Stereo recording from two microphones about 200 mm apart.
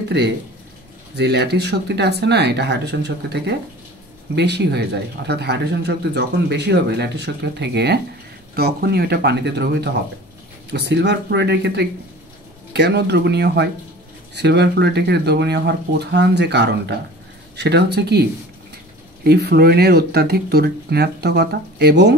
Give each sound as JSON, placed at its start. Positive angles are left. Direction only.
{"t": 1.1, "sound": "speech", "side_deg": -55}
{"t": 19.2, "sound": "speech", "side_deg": -55}